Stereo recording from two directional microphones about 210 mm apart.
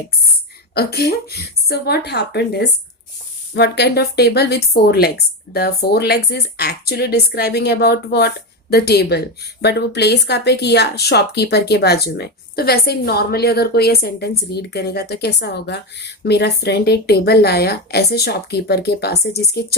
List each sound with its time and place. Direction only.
0.7 s speech: 50° left (ahead or behind)